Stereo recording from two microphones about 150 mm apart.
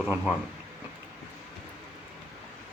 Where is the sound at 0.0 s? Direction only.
5° right (ahead or behind).